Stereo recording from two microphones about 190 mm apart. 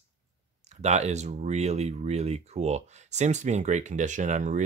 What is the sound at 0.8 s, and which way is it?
Speech, 35° right (ahead or behind).